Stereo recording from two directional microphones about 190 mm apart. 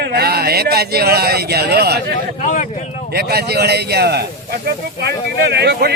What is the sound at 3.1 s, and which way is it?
Speech, 55° right (ahead or behind).